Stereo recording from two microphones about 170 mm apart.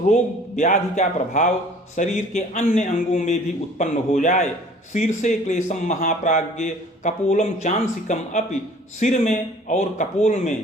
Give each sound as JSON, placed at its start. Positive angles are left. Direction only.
{"t": 0.1, "sound": "speech", "side_deg": 45}